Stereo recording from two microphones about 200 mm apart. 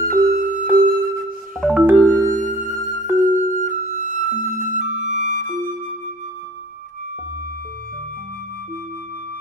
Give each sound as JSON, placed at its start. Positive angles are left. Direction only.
{"t": 0.0, "sound": "music", "side_deg": -45}
{"t": 1.6, "sound": "music", "side_deg": -10}
{"t": 2.0, "sound": "music", "side_deg": -40}